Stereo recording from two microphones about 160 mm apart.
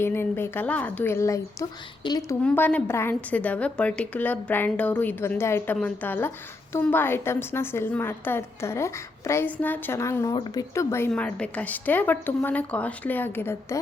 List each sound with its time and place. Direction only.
0.0 s a woman's voice: 15° left (ahead or behind)
2.4 s a woman's voice: 10° left (ahead or behind)